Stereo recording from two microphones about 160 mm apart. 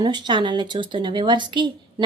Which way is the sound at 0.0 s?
30° right (ahead or behind).